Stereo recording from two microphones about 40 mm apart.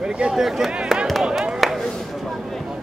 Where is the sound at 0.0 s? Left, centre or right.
Right.